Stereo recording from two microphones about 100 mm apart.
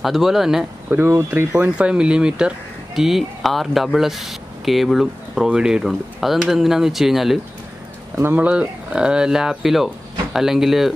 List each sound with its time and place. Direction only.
0.0 s speech: centre (ahead or behind)
0.8 s speech: 20° right (ahead or behind)
1.6 s speech: 10° right (ahead or behind)
8.2 s speech: 25° right (ahead or behind)
8.5 s speech: 10° right (ahead or behind)